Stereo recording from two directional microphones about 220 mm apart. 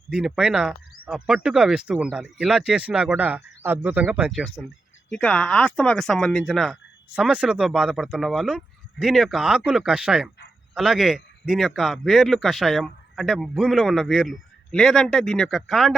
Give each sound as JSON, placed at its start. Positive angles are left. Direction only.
{"t": 0.1, "sound": "speech", "side_deg": -5}